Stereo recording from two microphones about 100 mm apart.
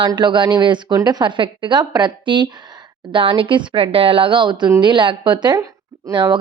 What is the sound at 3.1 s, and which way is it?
A woman's voice, 65° right (ahead or behind).